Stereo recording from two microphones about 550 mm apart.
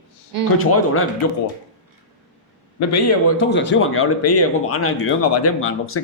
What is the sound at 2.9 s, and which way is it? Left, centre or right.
A man's voice, left.